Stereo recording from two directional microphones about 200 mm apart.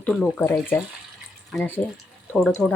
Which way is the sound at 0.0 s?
5° left (ahead or behind).